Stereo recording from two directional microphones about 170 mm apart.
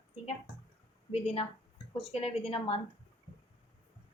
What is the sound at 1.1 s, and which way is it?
A woman's voice, 35° left (ahead or behind).